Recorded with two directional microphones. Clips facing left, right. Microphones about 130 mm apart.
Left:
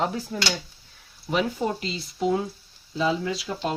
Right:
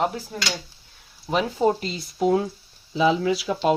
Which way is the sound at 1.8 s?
50° right (ahead or behind).